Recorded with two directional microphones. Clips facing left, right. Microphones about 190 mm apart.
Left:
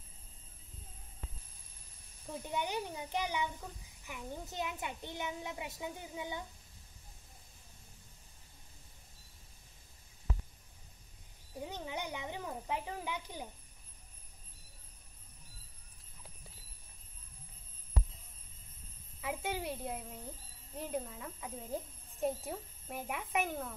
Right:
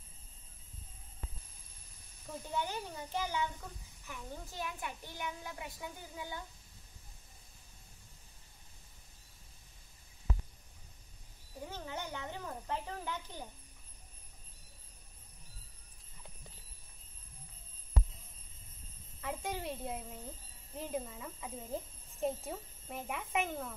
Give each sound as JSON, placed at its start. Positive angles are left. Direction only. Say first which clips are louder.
{"t": 2.4, "sound": "a child's voice", "louder": "left 1 dB", "side_deg": 15}
{"t": 11.6, "sound": "speech", "louder": "left 2 dB", "side_deg": 15}
{"t": 19.2, "sound": "speech", "louder": "left 1 dB", "side_deg": 5}